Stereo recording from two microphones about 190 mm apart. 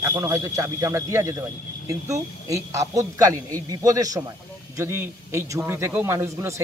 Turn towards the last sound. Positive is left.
turn(degrees=-15)  # may be behind; listen again after turning